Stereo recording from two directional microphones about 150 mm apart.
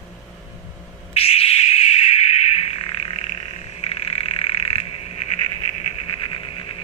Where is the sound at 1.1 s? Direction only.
40° left (ahead or behind).